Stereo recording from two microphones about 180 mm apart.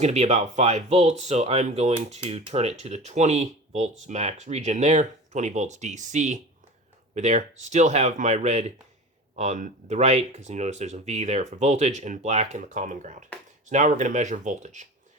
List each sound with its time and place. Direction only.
0.0 s speech: 40° right (ahead or behind)